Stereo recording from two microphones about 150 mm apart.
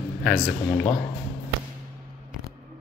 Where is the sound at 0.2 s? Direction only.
5° left (ahead or behind).